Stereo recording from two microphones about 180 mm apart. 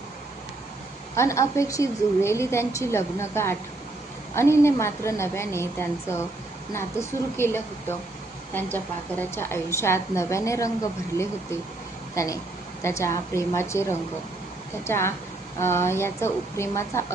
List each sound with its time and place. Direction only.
1.1 s a woman's voice: 15° left (ahead or behind)
12.1 s a woman's voice: 15° left (ahead or behind)
14.8 s a woman's voice: 15° left (ahead or behind)